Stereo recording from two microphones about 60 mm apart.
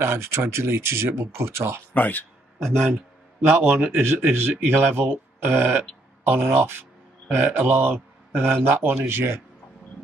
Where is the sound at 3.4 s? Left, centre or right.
Right.